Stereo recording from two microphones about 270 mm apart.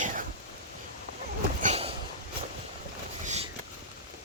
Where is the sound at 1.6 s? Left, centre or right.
Right.